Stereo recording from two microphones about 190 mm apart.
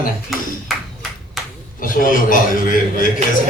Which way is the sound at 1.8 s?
45° left (ahead or behind).